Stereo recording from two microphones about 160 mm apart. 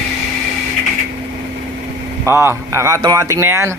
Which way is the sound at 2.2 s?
15° right (ahead or behind).